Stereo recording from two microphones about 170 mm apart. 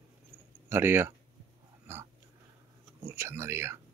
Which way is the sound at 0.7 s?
15° right (ahead or behind).